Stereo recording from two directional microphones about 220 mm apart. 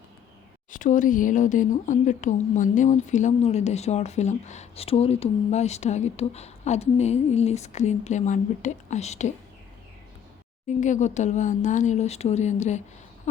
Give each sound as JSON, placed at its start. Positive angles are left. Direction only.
{"t": 0.7, "sound": "speech", "side_deg": 35}
{"t": 10.7, "sound": "speech", "side_deg": 35}